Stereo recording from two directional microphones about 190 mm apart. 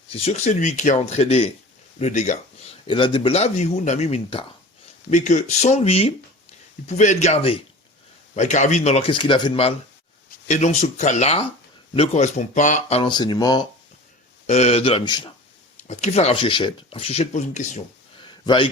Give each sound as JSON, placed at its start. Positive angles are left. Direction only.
{"t": 0.1, "sound": "a man's voice", "side_deg": 30}
{"t": 10.5, "sound": "a man's voice", "side_deg": 40}
{"t": 13.0, "sound": "speech", "side_deg": 25}
{"t": 14.4, "sound": "a man's voice", "side_deg": 35}
{"t": 15.8, "sound": "a man's voice", "side_deg": 40}
{"t": 18.4, "sound": "speech", "side_deg": 25}